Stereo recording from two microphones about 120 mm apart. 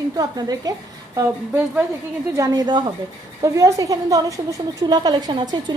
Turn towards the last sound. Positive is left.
turn(degrees=-40)  # may be behind; listen again after turning